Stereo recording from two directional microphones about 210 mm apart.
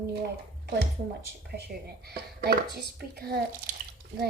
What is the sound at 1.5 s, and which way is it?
A child's voice, 50° right (ahead or behind).